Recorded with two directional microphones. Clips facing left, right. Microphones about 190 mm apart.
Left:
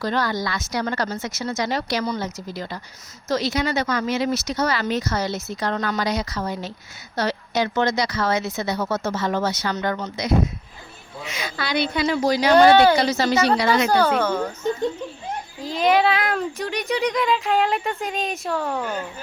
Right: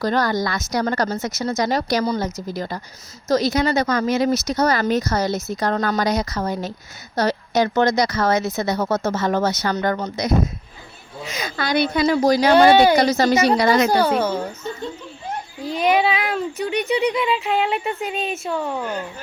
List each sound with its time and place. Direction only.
0.0 s speech: 45° right (ahead or behind)
12.5 s a woman's voice: 15° right (ahead or behind)
13.0 s speech: 45° right (ahead or behind)
13.3 s a woman's voice: 20° right (ahead or behind)
13.6 s speech: 45° right (ahead or behind)
13.9 s a woman's voice: 10° right (ahead or behind)
14.6 s speech: 15° left (ahead or behind)
15.8 s speech: 5° right (ahead or behind)